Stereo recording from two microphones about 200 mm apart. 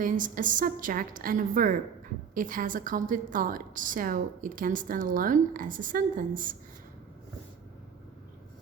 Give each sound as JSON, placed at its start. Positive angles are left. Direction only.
{"t": 0.0, "sound": "a woman's voice", "side_deg": -40}